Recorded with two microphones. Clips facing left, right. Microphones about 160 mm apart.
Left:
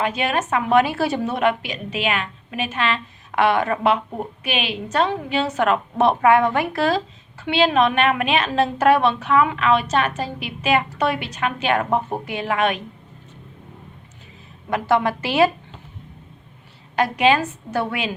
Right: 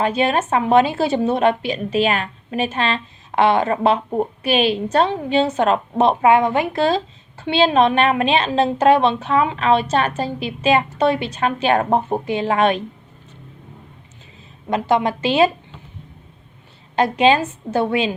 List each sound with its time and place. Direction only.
0.0 s a woman's voice: 30° right (ahead or behind)
14.7 s a woman's voice: 20° right (ahead or behind)
16.9 s a woman's voice: 25° right (ahead or behind)